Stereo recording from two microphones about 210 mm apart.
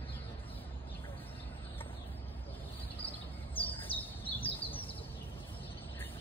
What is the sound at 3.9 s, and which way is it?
Bird, 25° left (ahead or behind).